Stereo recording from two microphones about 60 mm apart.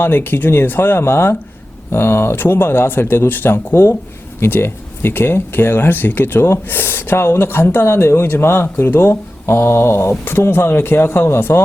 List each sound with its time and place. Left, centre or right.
0.0 s speech: left